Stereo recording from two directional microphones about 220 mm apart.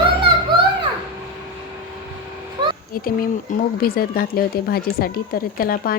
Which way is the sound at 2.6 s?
20° right (ahead or behind).